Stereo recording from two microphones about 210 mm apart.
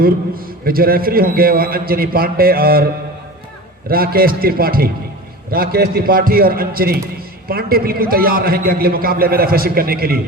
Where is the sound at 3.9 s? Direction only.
45° right (ahead or behind).